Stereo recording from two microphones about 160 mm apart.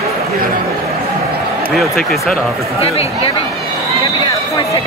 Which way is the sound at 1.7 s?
Centre (ahead or behind).